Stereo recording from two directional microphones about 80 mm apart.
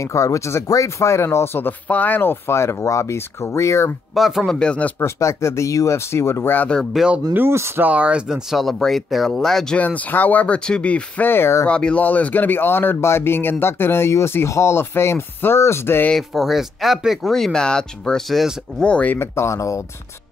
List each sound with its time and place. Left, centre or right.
0.0 s speech: left
4.1 s a man's voice: centre
5.0 s speech: left
7.0 s speech: centre
7.3 s speech: right
7.8 s speech: centre
9.8 s speech: centre
11.6 s speech: centre; by 16.1 s left
16.2 s speech: centre
18.8 s a man's voice: centre
19.1 s speech: left